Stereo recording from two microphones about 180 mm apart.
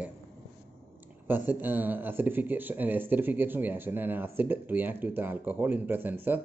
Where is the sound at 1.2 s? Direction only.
10° right (ahead or behind).